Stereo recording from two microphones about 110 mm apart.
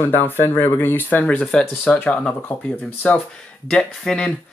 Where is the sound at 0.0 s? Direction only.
20° left (ahead or behind).